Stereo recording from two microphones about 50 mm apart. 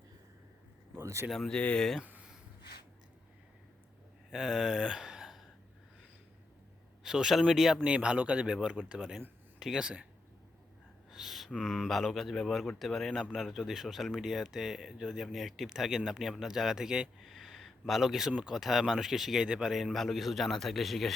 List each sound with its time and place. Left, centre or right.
1.0 s speech: right
1.5 s speech: centre
4.3 s speech: centre
7.0 s speech: centre
7.9 s speech: centre
9.6 s speech: centre
11.1 s speech: centre
17.2 s speech: centre
19.5 s speech: centre
19.7 s speech: centre